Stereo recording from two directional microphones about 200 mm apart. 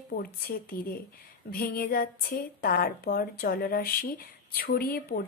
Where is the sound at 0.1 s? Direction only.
50° left (ahead or behind).